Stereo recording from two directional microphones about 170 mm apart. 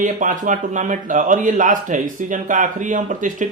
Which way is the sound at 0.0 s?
50° right (ahead or behind).